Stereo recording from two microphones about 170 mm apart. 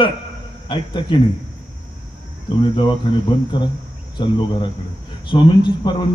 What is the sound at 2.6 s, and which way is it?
A man's voice, 30° left (ahead or behind).